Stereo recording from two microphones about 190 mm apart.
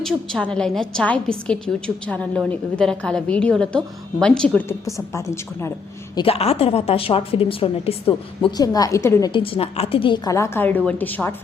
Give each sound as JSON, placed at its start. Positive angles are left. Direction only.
{"t": 0.0, "sound": "a woman's voice", "side_deg": 5}
{"t": 6.1, "sound": "a woman's voice", "side_deg": 30}
{"t": 9.3, "sound": "a woman's voice", "side_deg": 30}